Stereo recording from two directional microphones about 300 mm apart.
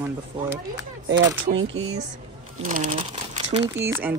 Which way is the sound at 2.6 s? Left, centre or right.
Right.